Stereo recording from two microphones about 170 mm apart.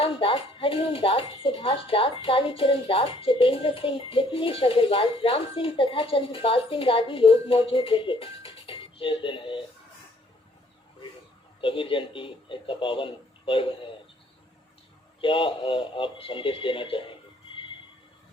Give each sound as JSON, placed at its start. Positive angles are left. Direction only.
{"t": 0.0, "sound": "speech", "side_deg": 30}
{"t": 11.6, "sound": "speech", "side_deg": 30}
{"t": 15.2, "sound": "speech", "side_deg": 30}